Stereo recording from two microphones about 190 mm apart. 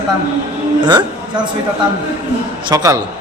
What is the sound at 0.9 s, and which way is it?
Speech, 25° right (ahead or behind).